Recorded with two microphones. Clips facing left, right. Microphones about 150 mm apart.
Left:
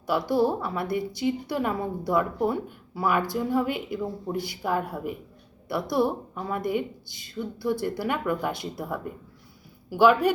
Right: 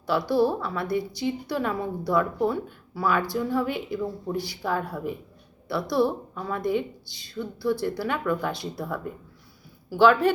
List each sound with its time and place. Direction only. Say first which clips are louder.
0.1 s a woman's voice: right 1 dB; 15° left (ahead or behind)